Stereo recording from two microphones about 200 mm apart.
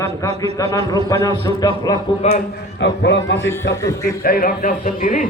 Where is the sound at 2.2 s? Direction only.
35° left (ahead or behind).